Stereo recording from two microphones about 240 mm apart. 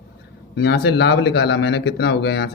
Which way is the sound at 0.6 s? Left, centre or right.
Left.